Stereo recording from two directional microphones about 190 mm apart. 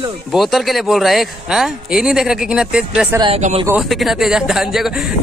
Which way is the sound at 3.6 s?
5° right (ahead or behind).